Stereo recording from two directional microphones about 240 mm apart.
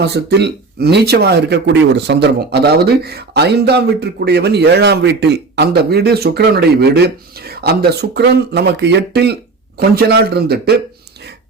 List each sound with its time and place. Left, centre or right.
0.0 s speech: right